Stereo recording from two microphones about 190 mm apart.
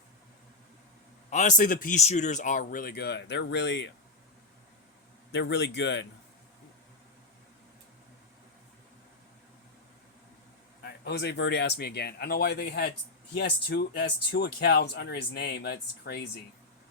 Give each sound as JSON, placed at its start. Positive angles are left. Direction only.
{"t": 1.3, "sound": "a man's voice", "side_deg": 40}
{"t": 5.3, "sound": "speech", "side_deg": 65}
{"t": 10.8, "sound": "speech", "side_deg": 60}